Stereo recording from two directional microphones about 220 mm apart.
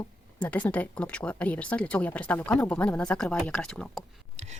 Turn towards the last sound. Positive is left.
turn(degrees=0)  # may be behind; listen again after turning